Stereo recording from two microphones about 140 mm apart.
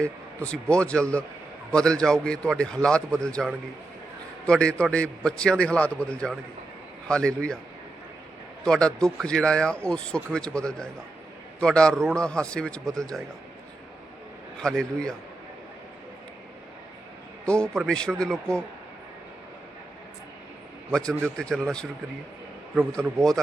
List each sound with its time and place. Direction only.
0.4 s a man's voice: 10° left (ahead or behind)
8.6 s a man's voice: 5° left (ahead or behind)
14.8 s speech: 5° left (ahead or behind)
17.4 s speech: 5° left (ahead or behind)
20.9 s speech: 5° left (ahead or behind)
23.0 s a man's voice: 15° right (ahead or behind)